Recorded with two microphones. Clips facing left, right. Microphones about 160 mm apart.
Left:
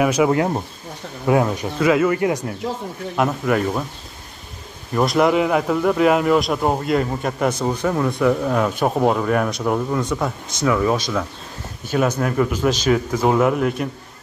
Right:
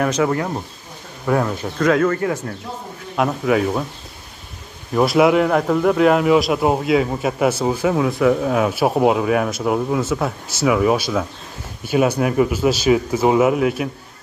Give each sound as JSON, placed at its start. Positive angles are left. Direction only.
{"t": 0.0, "sound": "speech", "side_deg": 10}
{"t": 1.8, "sound": "speech", "side_deg": 5}
{"t": 3.2, "sound": "speech", "side_deg": 0}
{"t": 4.9, "sound": "speech", "side_deg": -5}